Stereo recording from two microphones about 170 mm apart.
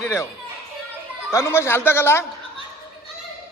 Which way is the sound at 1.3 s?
15° left (ahead or behind).